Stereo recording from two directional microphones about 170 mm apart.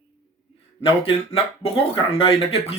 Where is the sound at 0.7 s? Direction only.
35° left (ahead or behind).